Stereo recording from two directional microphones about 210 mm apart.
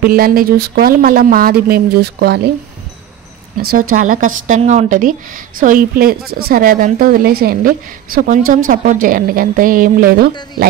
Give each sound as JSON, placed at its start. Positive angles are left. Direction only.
{"t": 0.0, "sound": "a woman's voice", "side_deg": -45}
{"t": 3.9, "sound": "a woman's voice", "side_deg": -35}